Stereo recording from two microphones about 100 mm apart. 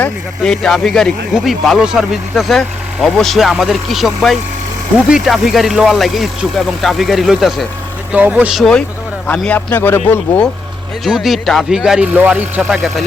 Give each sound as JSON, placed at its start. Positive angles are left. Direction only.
{"t": 0.4, "sound": "speech", "side_deg": 5}
{"t": 8.1, "sound": "speech", "side_deg": -15}
{"t": 8.5, "sound": "speech", "side_deg": 5}
{"t": 9.5, "sound": "speech", "side_deg": 15}
{"t": 11.0, "sound": "speech", "side_deg": -5}